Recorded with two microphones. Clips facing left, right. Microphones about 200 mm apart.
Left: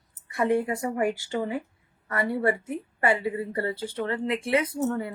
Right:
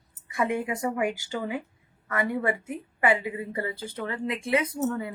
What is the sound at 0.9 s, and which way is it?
Speech, 40° left (ahead or behind).